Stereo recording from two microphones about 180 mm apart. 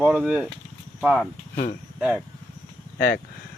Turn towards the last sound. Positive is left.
turn(degrees=60)  # may be behind; listen again after turning